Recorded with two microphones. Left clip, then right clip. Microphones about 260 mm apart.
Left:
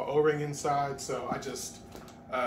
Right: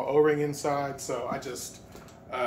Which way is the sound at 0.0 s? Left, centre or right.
Centre.